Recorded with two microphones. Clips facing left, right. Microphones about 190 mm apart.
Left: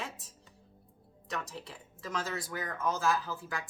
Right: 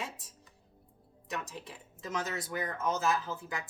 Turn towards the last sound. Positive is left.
turn(degrees=-20)  # may be behind; listen again after turning